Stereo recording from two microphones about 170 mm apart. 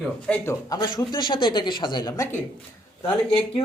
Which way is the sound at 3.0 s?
35° left (ahead or behind).